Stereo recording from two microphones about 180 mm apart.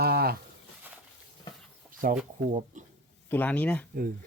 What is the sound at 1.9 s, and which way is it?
Bird, 50° right (ahead or behind).